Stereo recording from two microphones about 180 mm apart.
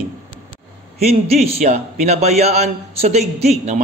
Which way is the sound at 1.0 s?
35° right (ahead or behind).